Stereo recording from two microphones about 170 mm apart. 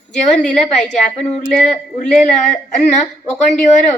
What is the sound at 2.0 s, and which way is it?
Speech, 45° left (ahead or behind).